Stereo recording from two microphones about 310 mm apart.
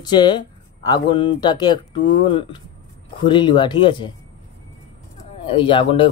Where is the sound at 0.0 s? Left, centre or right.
Centre.